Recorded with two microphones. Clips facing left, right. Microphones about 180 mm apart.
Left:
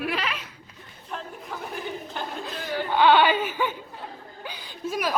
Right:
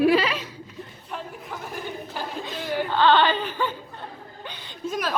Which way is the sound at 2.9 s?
15° left (ahead or behind).